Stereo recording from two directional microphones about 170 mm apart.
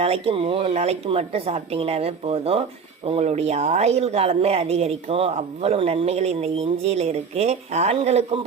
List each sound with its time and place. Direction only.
0.0 s speech: 35° right (ahead or behind)